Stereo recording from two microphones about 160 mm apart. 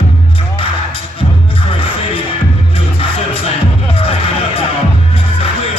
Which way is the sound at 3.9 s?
35° left (ahead or behind).